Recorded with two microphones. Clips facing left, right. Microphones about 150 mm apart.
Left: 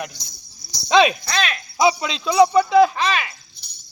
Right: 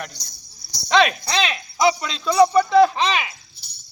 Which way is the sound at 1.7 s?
10° left (ahead or behind).